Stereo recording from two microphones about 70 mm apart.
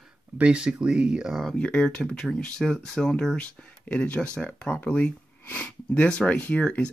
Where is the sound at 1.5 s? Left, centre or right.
Centre.